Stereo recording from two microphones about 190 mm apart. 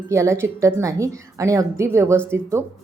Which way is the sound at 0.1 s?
15° right (ahead or behind).